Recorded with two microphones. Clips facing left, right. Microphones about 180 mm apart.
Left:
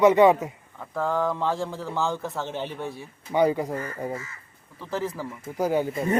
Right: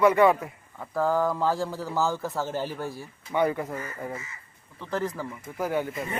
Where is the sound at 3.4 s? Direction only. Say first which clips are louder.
Left 4 dB; 20° left (ahead or behind).